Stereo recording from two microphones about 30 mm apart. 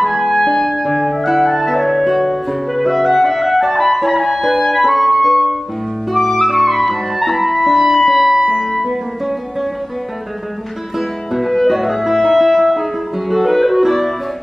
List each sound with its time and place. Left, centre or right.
0.0 s music: centre
0.8 s music: centre
1.5 s clarinet: centre
3.7 s music: centre
4.6 s music: centre
4.8 s music: centre
6.1 s clarinet: centre
7.7 s music: centre
8.4 s music: right
8.6 s music: centre
11.0 s music: centre